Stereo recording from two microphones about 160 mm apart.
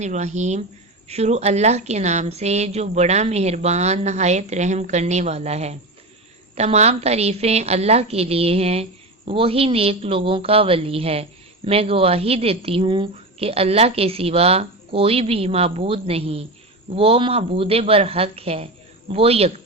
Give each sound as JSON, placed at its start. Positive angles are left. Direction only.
{"t": 0.0, "sound": "a woman's voice", "side_deg": -45}